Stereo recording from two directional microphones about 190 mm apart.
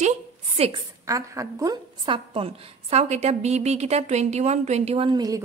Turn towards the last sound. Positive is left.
turn(degrees=-20)  # may be behind; listen again after turning